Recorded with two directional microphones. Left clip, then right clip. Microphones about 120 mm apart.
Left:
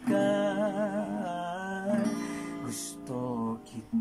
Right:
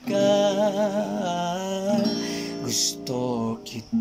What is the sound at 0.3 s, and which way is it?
Music, 15° right (ahead or behind).